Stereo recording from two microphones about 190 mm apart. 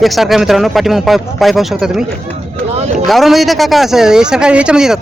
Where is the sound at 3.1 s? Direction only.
Centre (ahead or behind).